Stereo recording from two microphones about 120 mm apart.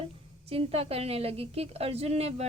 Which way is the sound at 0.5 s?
55° right (ahead or behind).